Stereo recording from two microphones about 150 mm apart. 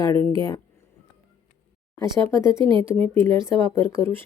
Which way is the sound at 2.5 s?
30° right (ahead or behind).